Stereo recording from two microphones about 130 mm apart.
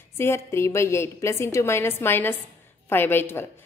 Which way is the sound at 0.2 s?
20° left (ahead or behind).